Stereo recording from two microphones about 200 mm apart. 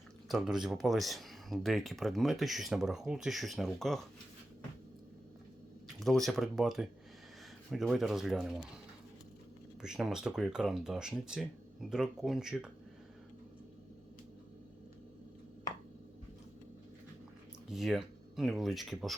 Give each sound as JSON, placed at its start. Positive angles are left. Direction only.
{"t": 0.3, "sound": "speech", "side_deg": 0}
{"t": 6.0, "sound": "speech", "side_deg": 0}
{"t": 9.8, "sound": "speech", "side_deg": -5}
{"t": 17.7, "sound": "speech", "side_deg": 0}